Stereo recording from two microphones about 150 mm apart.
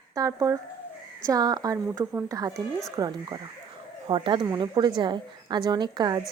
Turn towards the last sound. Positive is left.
turn(degrees=-30)  # may be behind; listen again after turning